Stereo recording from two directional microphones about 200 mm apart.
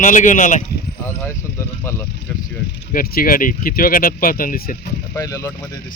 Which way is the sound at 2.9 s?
45° left (ahead or behind).